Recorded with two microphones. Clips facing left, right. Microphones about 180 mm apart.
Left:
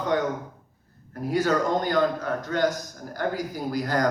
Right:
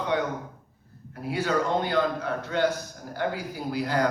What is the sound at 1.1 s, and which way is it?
A man's voice, 40° left (ahead or behind).